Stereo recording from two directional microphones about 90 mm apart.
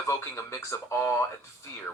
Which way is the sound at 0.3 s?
30° left (ahead or behind).